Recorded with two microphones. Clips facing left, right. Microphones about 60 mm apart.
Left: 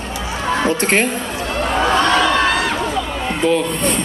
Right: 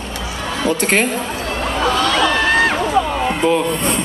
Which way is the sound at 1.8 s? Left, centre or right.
Left.